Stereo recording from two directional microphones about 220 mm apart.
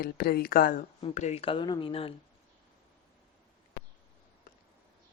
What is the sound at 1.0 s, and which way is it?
Speech, 30° left (ahead or behind).